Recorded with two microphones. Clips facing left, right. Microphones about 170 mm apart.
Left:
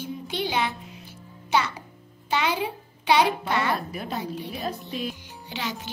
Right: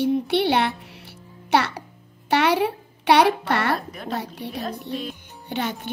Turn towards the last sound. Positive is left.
turn(degrees=-55)  # may be behind; listen again after turning